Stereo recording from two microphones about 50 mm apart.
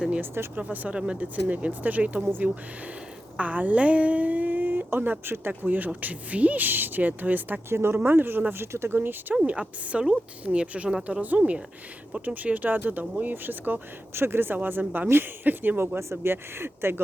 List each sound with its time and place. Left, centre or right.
0.5 s speech: right
0.9 s speech: centre
1.2 s speech: right
3.3 s speech: right
7.7 s speech: right
7.9 s speech: right
8.7 s speech: right
9.3 s speech: right
11.0 s speech: right
15.0 s speech: right
15.4 s speech: right
16.0 s speech: right